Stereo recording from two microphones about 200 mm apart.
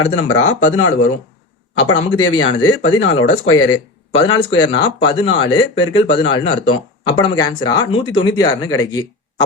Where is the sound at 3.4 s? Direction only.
90° left.